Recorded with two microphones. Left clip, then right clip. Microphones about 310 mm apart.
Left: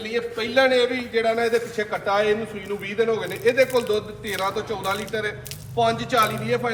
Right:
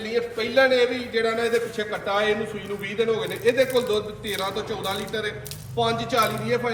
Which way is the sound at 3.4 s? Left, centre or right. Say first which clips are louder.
Left 2 dB; centre.